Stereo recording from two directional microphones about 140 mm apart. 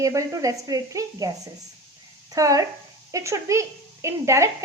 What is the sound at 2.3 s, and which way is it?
A woman's voice, 25° right (ahead or behind).